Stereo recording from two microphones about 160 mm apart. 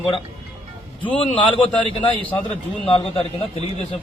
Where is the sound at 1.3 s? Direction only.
10° left (ahead or behind).